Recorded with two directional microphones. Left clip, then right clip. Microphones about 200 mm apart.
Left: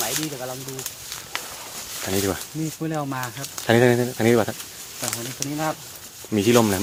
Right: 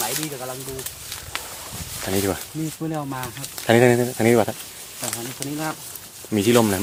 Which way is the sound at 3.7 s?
5° right (ahead or behind).